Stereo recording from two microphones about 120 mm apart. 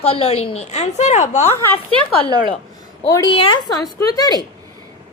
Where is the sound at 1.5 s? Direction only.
20° left (ahead or behind).